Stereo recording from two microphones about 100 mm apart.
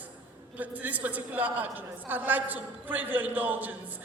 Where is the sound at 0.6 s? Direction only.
15° right (ahead or behind).